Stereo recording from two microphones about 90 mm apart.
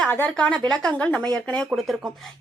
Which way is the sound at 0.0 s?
15° left (ahead or behind).